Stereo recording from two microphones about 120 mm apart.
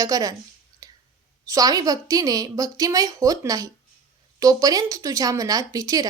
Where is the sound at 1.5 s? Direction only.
30° right (ahead or behind).